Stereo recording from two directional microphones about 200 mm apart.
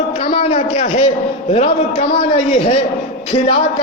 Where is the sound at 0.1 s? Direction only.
30° left (ahead or behind).